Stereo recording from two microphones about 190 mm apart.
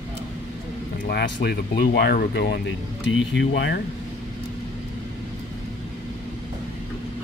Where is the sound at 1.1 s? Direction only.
65° left (ahead or behind).